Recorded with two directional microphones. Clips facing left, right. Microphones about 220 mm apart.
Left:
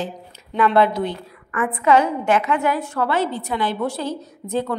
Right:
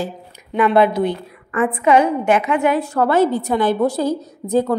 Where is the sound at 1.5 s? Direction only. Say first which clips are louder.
Right 5 dB; 30° right (ahead or behind).